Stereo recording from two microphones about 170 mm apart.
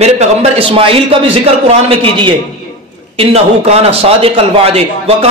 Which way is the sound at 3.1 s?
35° right (ahead or behind).